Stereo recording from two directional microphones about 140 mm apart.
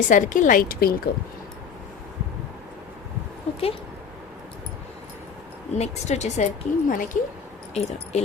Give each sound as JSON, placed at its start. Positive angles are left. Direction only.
{"t": 0.1, "sound": "speech", "side_deg": 70}
{"t": 3.5, "sound": "dog", "side_deg": 45}
{"t": 5.7, "sound": "a woman's voice", "side_deg": 55}
{"t": 7.7, "sound": "speech", "side_deg": 50}